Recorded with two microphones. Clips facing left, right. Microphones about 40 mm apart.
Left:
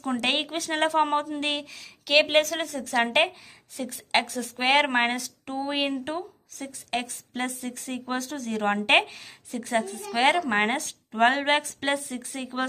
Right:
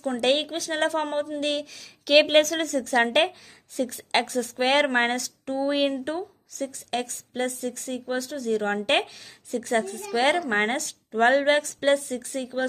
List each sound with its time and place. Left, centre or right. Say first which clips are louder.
0.0 s a woman's voice: right 3 dB; left
2.0 s a woman's voice: right 3 dB; centre
4.6 s a woman's voice: even; centre
7.9 s a woman's voice: even; left
12.5 s a woman's voice: right 2 dB; left